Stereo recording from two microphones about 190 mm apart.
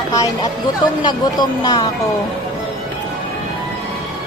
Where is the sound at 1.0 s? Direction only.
20° left (ahead or behind).